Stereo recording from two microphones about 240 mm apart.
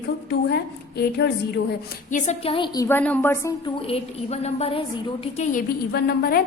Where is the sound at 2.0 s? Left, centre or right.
Left; by 3.5 s centre.